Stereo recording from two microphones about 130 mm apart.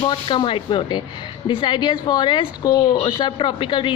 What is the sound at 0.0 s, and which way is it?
A woman's voice, 35° left (ahead or behind).